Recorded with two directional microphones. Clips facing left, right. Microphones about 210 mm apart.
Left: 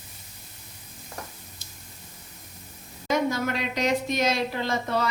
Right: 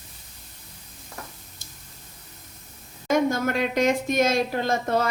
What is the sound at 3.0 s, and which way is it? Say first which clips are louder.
Speech: right 3 dB; 50° right (ahead or behind).